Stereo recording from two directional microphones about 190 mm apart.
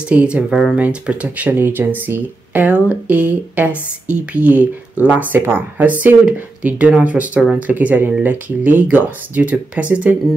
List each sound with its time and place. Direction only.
0.1 s speech: 5° right (ahead or behind)